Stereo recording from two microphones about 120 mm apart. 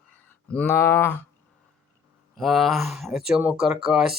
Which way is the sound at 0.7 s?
20° left (ahead or behind).